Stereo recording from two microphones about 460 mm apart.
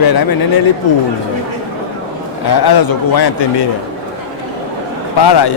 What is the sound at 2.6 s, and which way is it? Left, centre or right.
Speech, left.